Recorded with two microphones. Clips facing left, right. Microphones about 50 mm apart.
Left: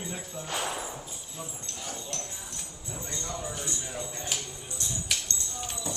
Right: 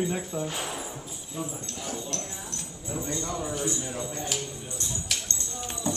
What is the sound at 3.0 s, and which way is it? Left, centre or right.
Speech, centre.